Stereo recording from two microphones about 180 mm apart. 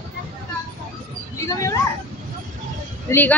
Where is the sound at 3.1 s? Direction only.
15° left (ahead or behind).